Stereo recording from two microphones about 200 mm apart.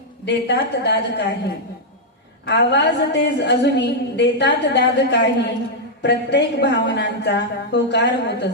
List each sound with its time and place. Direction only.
0.3 s a woman's voice: 60° left (ahead or behind)